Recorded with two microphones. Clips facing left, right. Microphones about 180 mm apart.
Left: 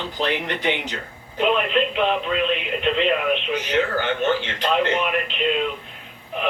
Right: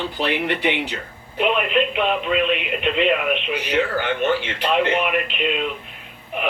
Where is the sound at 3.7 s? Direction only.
10° right (ahead or behind).